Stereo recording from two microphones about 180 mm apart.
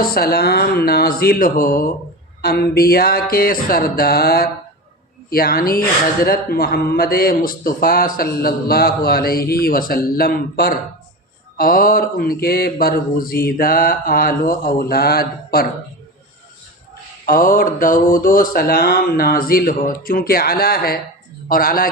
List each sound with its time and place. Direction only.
0.0 s a man's voice: 55° left (ahead or behind)
17.2 s speech: 50° left (ahead or behind)